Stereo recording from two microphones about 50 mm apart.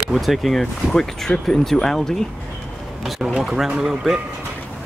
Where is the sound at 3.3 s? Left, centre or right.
Centre.